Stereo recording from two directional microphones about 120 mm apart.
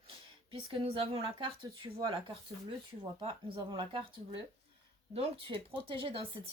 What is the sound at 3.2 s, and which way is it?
Speech, 50° right (ahead or behind).